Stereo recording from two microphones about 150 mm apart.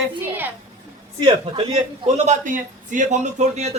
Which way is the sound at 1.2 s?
35° right (ahead or behind).